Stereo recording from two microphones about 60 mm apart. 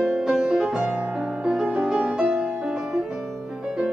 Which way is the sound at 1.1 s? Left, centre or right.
Centre.